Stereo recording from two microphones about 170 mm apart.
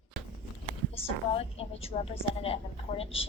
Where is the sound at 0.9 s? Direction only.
35° left (ahead or behind).